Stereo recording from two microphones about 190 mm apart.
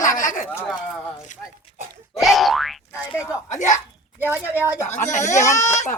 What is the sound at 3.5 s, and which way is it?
Speech, 40° left (ahead or behind).